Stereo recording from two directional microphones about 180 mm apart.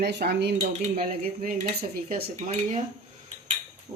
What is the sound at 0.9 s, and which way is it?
Speech, 55° right (ahead or behind).